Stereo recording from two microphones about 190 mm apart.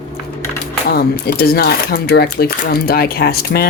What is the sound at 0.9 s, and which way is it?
Speech, 55° left (ahead or behind).